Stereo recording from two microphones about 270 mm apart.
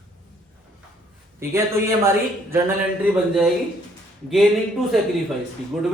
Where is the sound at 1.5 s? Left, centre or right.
Centre.